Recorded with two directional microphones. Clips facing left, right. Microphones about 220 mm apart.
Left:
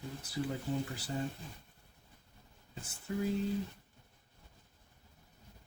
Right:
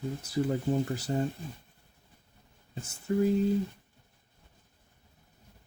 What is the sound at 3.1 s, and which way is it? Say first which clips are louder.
Speech: right 9 dB; 40° right (ahead or behind).